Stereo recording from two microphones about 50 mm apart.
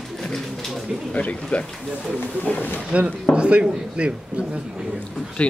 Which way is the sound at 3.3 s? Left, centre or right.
Right.